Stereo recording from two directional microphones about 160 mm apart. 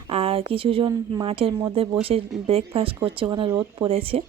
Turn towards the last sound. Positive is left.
turn(degrees=-35)  # may be behind; listen again after turning